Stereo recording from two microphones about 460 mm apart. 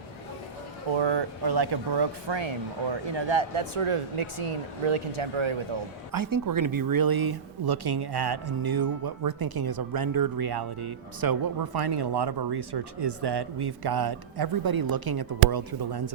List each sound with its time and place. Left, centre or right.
0.9 s speech: right
6.1 s speech: right